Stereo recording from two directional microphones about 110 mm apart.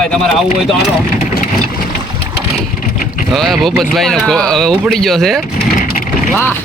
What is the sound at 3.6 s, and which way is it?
Speech, centre (ahead or behind).